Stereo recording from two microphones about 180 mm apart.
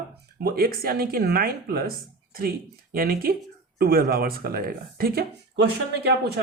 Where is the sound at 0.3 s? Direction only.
60° right (ahead or behind).